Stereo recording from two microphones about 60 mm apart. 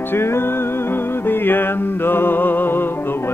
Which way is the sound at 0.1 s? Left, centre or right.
Left.